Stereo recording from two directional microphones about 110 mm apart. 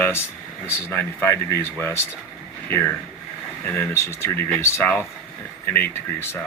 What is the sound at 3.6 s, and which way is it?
Speech, 20° left (ahead or behind).